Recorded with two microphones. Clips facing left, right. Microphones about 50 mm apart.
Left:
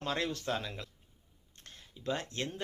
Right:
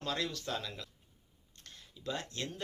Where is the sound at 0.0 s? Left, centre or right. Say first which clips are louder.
Left 2 dB; left.